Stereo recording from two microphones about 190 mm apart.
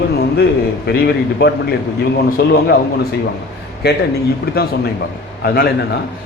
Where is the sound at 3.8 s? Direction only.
55° left (ahead or behind).